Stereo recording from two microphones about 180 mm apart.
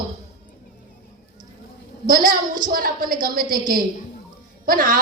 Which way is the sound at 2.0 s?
50° right (ahead or behind).